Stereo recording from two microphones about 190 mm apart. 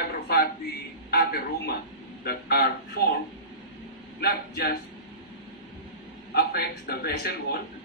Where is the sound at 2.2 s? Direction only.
55° left (ahead or behind).